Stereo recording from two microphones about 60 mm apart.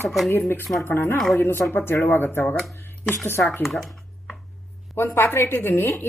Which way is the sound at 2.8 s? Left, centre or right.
Left.